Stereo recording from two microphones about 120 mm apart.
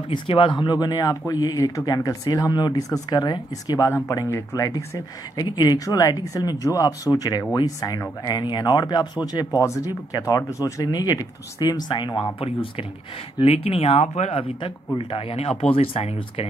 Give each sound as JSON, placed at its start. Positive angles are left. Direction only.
{"t": 0.1, "sound": "speech", "side_deg": 45}
{"t": 13.4, "sound": "speech", "side_deg": 55}
{"t": 15.0, "sound": "speech", "side_deg": 50}